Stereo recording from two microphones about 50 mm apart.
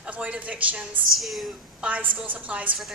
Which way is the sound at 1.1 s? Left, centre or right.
Centre.